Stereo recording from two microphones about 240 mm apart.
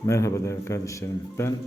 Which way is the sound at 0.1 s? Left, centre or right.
Centre.